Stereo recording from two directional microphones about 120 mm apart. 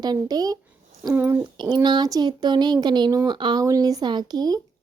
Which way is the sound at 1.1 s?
15° right (ahead or behind).